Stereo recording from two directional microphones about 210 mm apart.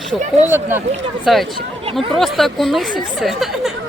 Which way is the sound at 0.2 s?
35° right (ahead or behind).